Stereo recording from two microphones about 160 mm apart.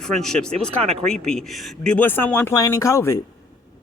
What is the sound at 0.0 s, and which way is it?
A man's voice, 5° left (ahead or behind).